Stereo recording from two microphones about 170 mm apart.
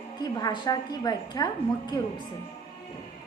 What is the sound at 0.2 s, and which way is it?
A woman's voice, 25° left (ahead or behind).